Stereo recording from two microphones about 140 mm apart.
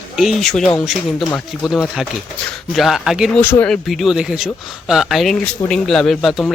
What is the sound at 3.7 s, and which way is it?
A man's voice, centre (ahead or behind).